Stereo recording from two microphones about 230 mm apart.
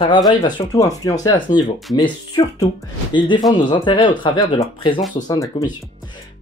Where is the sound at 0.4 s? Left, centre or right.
Centre.